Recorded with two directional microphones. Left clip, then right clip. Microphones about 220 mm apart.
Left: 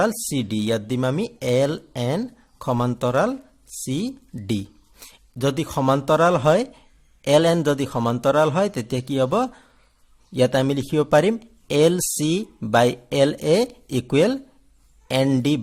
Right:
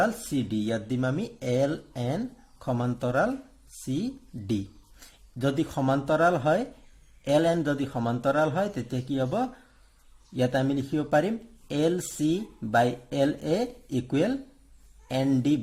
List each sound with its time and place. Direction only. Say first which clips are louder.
0.0 s speech: left 4 dB; 40° left (ahead or behind)